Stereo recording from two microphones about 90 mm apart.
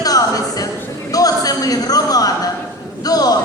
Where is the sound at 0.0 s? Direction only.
40° left (ahead or behind).